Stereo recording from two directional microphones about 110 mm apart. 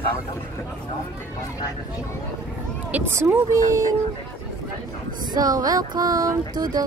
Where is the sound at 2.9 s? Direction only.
20° right (ahead or behind).